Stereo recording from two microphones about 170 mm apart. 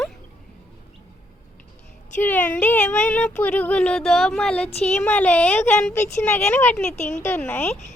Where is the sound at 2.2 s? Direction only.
10° left (ahead or behind).